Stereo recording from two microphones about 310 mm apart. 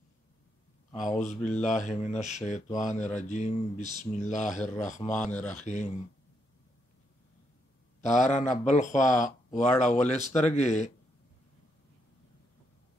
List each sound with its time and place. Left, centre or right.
0.9 s speech: left
8.1 s speech: left